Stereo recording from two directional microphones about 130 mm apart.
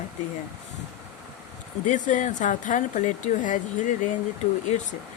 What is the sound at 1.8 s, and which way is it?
Speech, 75° left (ahead or behind).